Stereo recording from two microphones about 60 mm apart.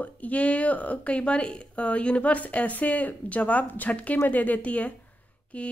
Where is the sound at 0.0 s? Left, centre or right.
Left.